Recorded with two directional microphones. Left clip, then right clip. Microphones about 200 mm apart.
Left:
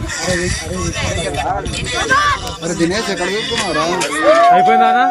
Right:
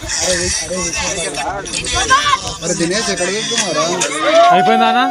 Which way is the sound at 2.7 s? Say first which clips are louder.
Even; 50° left (ahead or behind).